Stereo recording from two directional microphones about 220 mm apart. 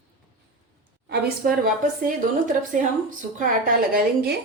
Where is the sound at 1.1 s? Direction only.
40° right (ahead or behind).